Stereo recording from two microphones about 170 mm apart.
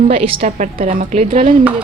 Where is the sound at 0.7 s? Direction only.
45° right (ahead or behind).